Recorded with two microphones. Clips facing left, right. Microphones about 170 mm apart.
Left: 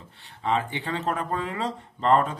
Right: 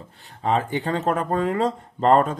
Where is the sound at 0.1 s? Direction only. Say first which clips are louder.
Right 3 dB; 40° right (ahead or behind).